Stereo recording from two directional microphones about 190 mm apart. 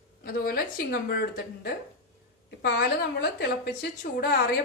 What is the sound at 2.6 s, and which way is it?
A woman's voice, 55° left (ahead or behind).